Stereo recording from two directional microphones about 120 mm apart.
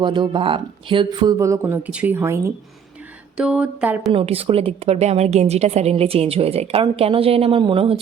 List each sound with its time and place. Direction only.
0.0 s speech: 40° right (ahead or behind); by 2.4 s 20° right (ahead or behind)
3.3 s speech: 10° right (ahead or behind)
4.1 s a woman's voice: 50° right (ahead or behind)